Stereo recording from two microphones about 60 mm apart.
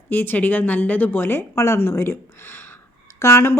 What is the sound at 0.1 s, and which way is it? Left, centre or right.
Speech, left.